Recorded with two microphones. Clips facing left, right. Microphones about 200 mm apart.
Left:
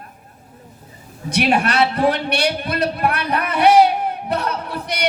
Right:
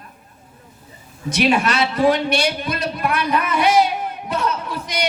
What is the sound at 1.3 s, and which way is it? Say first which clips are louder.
A man's voice: even; 60° left (ahead or behind).